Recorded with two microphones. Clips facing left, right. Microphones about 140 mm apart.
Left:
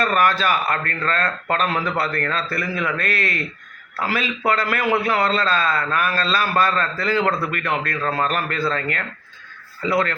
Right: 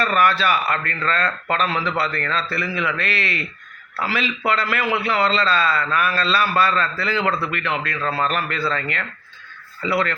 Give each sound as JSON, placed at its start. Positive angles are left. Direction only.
{"t": 0.0, "sound": "a man's voice", "side_deg": 45}